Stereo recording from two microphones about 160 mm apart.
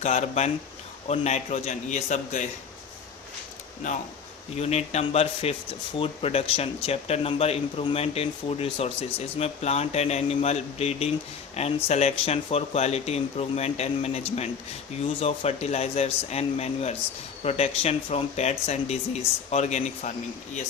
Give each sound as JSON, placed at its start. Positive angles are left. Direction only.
{"t": 0.0, "sound": "speech", "side_deg": 45}
{"t": 4.6, "sound": "speech", "side_deg": 45}